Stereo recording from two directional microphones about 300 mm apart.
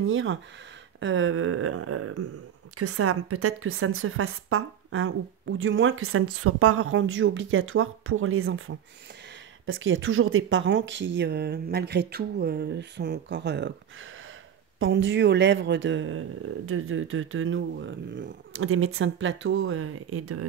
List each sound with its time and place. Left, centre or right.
0.0 s a woman's voice: right
14.8 s speech: right